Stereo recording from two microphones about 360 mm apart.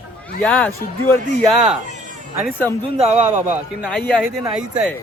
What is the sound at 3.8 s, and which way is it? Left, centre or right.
Speech, centre.